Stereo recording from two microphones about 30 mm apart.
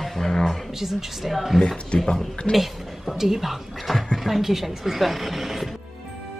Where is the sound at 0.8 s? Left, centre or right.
Centre.